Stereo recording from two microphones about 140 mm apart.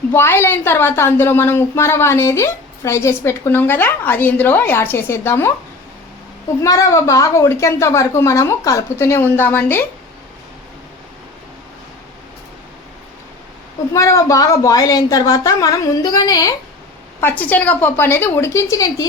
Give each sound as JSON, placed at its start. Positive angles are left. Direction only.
{"t": 0.1, "sound": "a woman's voice", "side_deg": 15}
{"t": 6.6, "sound": "a woman's voice", "side_deg": 25}
{"t": 13.9, "sound": "a woman's voice", "side_deg": 20}
{"t": 17.2, "sound": "a woman's voice", "side_deg": 15}